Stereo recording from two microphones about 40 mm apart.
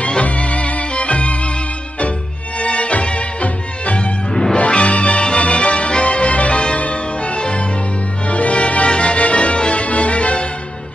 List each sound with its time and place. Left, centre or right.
0.0 s music: left
2.6 s music: left
4.3 s music: centre
4.6 s music: left